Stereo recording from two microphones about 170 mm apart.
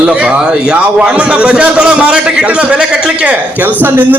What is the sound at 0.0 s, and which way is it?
A man's voice, 5° right (ahead or behind).